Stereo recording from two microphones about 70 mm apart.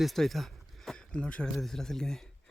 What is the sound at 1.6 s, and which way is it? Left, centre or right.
Speech, centre.